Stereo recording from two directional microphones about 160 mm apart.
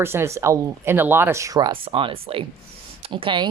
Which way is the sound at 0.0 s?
15° right (ahead or behind).